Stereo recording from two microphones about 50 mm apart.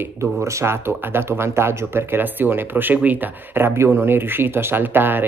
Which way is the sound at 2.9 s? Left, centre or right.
Right.